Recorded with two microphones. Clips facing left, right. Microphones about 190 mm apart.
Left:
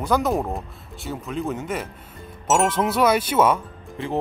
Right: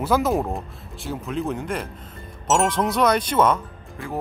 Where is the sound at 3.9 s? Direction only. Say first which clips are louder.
Left 4 dB; 25° left (ahead or behind).